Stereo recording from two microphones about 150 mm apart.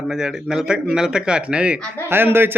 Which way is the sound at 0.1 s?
5° right (ahead or behind).